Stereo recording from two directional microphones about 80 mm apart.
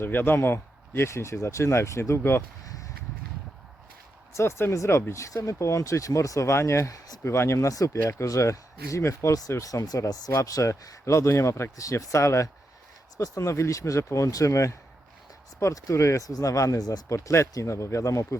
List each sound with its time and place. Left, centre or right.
0.0 s speech: left
4.4 s speech: left
17.1 s speech: left